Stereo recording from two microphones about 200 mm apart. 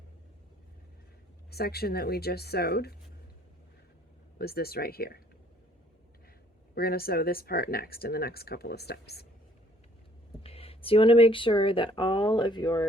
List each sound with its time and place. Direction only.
1.5 s speech: 50° left (ahead or behind)
4.4 s speech: 50° left (ahead or behind)
6.7 s speech: 50° left (ahead or behind)
10.4 s speech: 30° left (ahead or behind)